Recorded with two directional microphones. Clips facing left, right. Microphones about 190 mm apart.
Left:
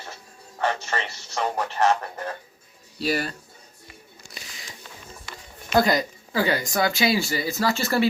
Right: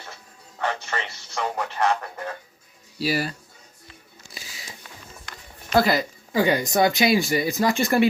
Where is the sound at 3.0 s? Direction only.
5° right (ahead or behind).